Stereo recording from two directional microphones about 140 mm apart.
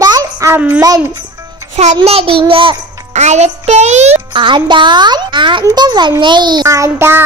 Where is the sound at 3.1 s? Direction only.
55° right (ahead or behind).